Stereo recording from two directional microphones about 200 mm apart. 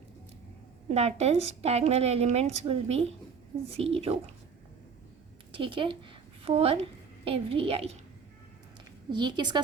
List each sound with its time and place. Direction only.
0.9 s a woman's voice: 30° right (ahead or behind)
5.5 s a woman's voice: 25° right (ahead or behind)
9.1 s a woman's voice: 20° right (ahead or behind)